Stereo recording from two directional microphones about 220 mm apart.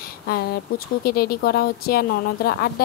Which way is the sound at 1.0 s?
45° left (ahead or behind).